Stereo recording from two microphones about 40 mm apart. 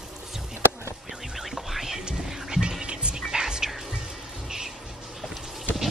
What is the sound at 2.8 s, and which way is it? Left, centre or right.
Music, right.